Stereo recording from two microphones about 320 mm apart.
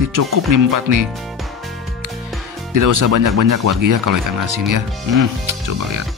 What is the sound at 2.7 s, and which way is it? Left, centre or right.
Speech, right.